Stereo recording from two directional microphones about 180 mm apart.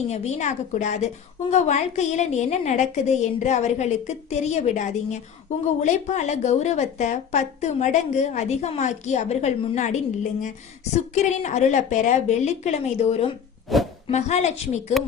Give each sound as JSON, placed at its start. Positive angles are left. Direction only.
{"t": 0.1, "sound": "a woman's voice", "side_deg": 40}
{"t": 13.7, "sound": "speech", "side_deg": 0}
{"t": 14.1, "sound": "a woman's voice", "side_deg": 40}